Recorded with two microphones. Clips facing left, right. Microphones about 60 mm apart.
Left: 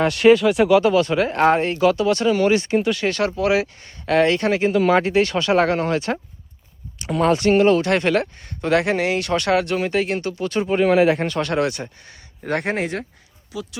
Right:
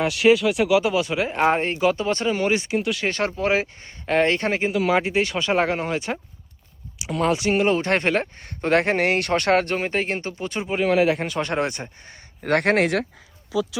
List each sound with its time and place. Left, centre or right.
0.0 s speech: centre
1.5 s speech: right
2.6 s speech: centre
3.1 s speech: right
4.0 s speech: centre
4.3 s speech: right
4.7 s speech: centre
7.7 s speech: right
8.4 s speech: right
10.6 s speech: centre
11.3 s speech: right
12.4 s speech: right